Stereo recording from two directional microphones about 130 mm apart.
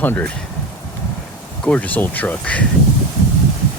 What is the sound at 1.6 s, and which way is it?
Speech, 10° left (ahead or behind).